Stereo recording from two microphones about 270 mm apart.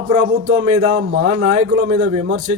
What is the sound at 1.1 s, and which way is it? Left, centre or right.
Speech, right.